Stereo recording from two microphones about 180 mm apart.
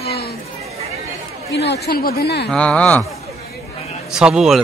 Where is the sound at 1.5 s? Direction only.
65° left (ahead or behind).